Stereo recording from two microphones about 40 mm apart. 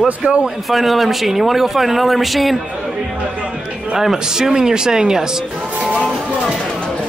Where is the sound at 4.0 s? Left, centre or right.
Centre.